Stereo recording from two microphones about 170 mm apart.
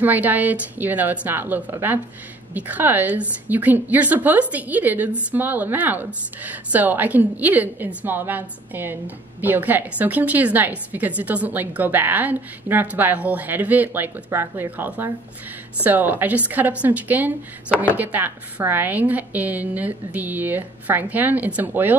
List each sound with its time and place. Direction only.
0.0 s a woman's voice: 10° right (ahead or behind)